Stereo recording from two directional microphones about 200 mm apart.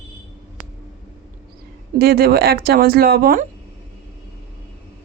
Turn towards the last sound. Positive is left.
turn(degrees=-50)  # may be behind; listen again after turning